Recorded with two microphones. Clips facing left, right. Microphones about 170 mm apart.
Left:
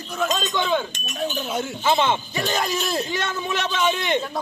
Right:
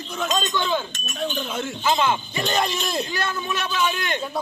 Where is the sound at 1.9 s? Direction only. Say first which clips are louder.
Left 1 dB; 25° left (ahead or behind).